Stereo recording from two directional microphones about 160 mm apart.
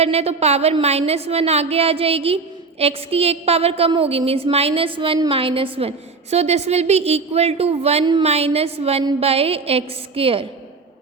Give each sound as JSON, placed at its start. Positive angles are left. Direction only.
{"t": 0.0, "sound": "a woman's voice", "side_deg": -40}